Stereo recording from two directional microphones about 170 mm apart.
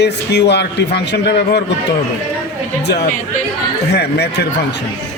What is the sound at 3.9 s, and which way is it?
Speech, 75° left (ahead or behind).